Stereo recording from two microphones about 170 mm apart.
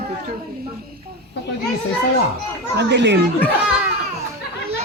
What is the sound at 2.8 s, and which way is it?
Speech, 85° right.